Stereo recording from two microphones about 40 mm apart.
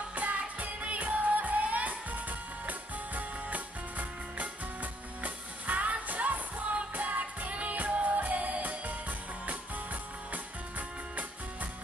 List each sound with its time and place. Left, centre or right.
0.1 s music: right